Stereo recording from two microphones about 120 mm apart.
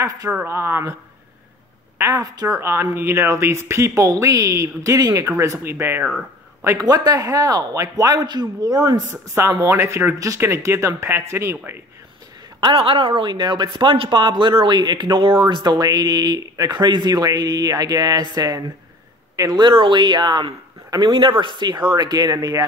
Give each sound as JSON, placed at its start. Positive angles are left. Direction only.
{"t": 0.3, "sound": "speech", "side_deg": -15}
{"t": 2.0, "sound": "a woman's voice", "side_deg": -20}
{"t": 12.5, "sound": "speech", "side_deg": -45}